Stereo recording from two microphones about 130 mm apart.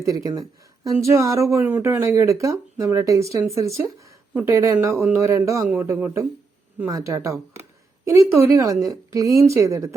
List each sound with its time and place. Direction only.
0.0 s speech: 25° right (ahead or behind)
5.6 s speech: 10° right (ahead or behind)